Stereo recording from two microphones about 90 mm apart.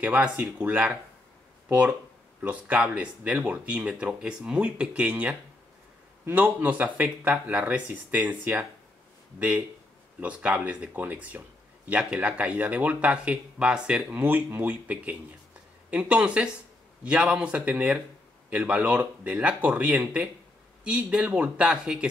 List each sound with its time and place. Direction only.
0.0 s speech: 15° right (ahead or behind)